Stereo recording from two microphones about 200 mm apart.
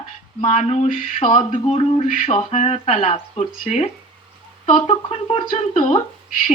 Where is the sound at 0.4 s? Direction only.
35° left (ahead or behind).